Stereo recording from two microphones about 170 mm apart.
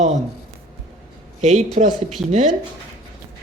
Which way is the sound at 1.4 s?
40° right (ahead or behind).